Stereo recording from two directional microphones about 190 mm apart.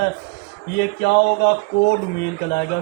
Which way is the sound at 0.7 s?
60° left (ahead or behind).